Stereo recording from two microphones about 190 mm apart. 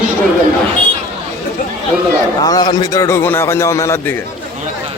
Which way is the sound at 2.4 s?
20° left (ahead or behind).